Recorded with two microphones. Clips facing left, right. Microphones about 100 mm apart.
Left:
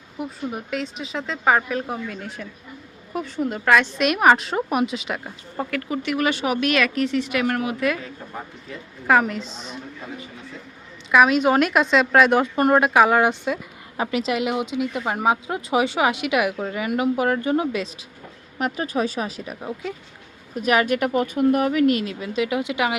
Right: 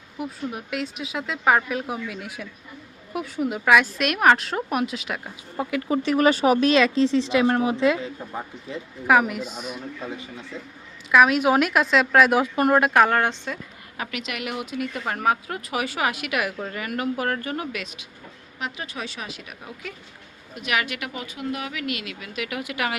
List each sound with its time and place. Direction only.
0.2 s a woman's voice: centre (ahead or behind)
5.9 s speech: 35° right (ahead or behind)
9.0 s a woman's voice: 5° right (ahead or behind)
11.1 s a woman's voice: centre (ahead or behind)
13.9 s speech: 25° left (ahead or behind)
18.6 s speech: 40° left (ahead or behind); by 23.0 s 20° left (ahead or behind)